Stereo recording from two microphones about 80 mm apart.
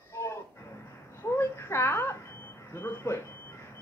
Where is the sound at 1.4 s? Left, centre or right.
Left.